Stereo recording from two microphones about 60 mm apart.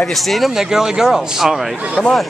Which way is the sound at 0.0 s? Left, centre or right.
Centre.